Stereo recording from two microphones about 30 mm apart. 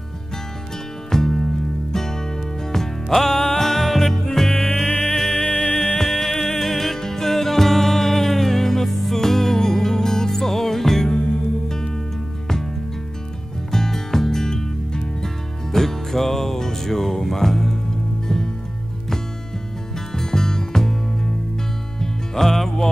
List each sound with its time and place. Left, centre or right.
1.1 s music: centre
13.7 s music: centre
20.2 s music: centre
22.0 s music: centre